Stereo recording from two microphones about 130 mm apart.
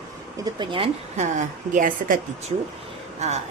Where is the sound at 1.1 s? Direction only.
65° right (ahead or behind); by 2.2 s 90° right.